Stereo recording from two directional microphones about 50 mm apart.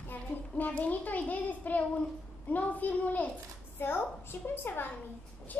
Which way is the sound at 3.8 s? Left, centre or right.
Left.